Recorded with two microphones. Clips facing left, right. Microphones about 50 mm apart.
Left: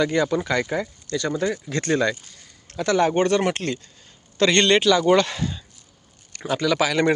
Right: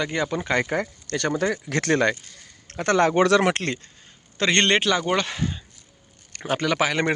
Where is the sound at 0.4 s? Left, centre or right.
Right.